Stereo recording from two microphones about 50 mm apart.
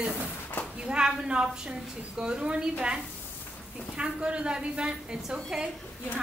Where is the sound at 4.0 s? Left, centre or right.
Centre.